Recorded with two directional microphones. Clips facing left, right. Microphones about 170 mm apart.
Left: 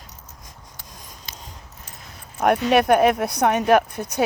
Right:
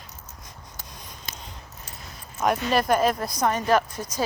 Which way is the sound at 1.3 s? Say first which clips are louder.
Right 1 dB; 50° right (ahead or behind).